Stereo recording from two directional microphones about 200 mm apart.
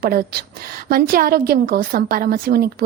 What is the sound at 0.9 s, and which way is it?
Speech, 50° right (ahead or behind).